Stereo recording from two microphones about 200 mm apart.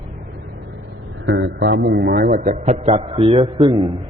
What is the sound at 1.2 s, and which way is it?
A man's voice, 60° right (ahead or behind).